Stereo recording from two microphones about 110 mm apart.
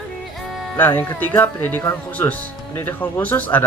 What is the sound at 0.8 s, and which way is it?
Speech, 15° left (ahead or behind).